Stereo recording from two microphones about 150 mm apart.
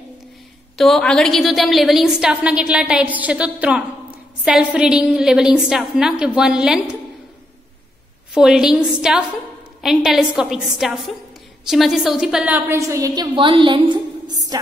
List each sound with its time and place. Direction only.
0.7 s a woman's voice: centre (ahead or behind)
8.4 s a woman's voice: 5° right (ahead or behind); by 14.6 s 30° right (ahead or behind)